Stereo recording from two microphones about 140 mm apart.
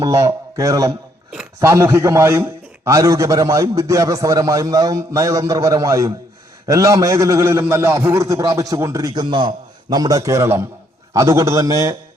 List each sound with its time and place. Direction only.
0.0 s a man's voice: 25° right (ahead or behind)